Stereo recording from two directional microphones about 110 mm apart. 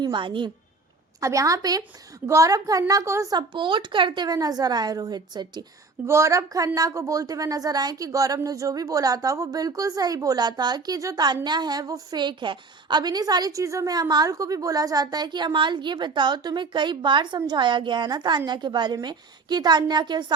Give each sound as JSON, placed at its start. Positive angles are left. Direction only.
{"t": 0.0, "sound": "a woman's voice", "side_deg": -45}
{"t": 1.2, "sound": "a woman's voice", "side_deg": -30}
{"t": 3.3, "sound": "a woman's voice", "side_deg": -45}
{"t": 6.1, "sound": "a woman's voice", "side_deg": -25}